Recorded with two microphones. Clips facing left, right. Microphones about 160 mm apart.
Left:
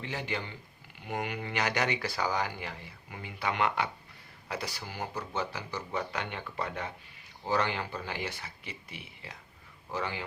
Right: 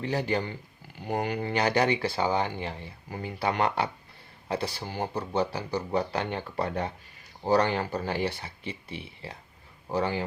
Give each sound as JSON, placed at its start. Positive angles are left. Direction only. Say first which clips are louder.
{"t": 0.0, "sound": "speech", "louder": "right 8 dB", "side_deg": -40}